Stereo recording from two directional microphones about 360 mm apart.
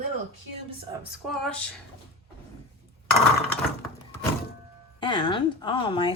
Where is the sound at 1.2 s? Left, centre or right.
Centre.